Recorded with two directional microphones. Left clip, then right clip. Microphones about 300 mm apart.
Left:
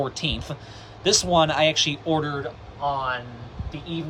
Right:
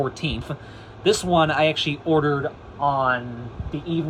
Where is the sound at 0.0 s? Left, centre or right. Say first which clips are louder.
Even; centre.